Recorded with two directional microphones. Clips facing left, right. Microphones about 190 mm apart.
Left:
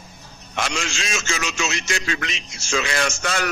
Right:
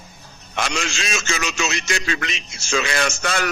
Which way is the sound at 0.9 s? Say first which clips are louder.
Right 1 dB; 65° right (ahead or behind).